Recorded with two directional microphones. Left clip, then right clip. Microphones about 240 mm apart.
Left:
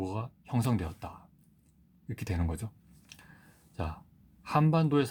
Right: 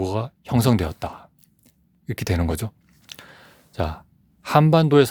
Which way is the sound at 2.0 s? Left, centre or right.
Right.